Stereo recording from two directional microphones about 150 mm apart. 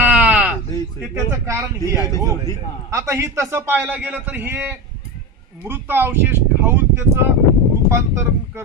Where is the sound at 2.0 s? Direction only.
20° left (ahead or behind).